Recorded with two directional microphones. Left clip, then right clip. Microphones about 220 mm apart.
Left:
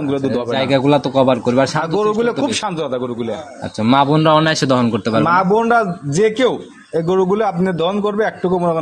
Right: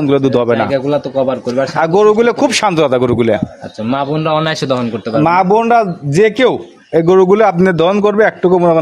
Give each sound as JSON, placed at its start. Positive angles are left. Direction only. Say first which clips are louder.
{"t": 0.5, "sound": "speech", "louder": "right 2 dB", "side_deg": 15}
{"t": 1.8, "sound": "a man's voice", "louder": "right 7 dB", "side_deg": -45}
{"t": 3.8, "sound": "speech", "louder": "left 3 dB", "side_deg": 15}
{"t": 4.4, "sound": "speech", "louder": "even", "side_deg": 0}
{"t": 5.2, "sound": "a man's voice", "louder": "right 4 dB", "side_deg": -45}